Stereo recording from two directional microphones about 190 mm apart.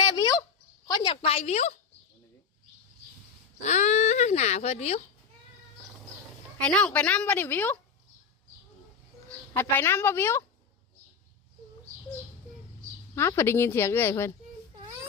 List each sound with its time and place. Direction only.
0.9 s speech: 25° left (ahead or behind)
3.6 s speech: 35° left (ahead or behind)
6.6 s a woman's voice: 5° left (ahead or behind)
9.6 s a woman's voice: 10° left (ahead or behind)
13.1 s a woman's voice: 15° left (ahead or behind)